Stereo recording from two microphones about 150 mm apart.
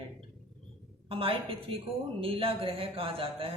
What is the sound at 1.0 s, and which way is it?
Speech, 40° right (ahead or behind).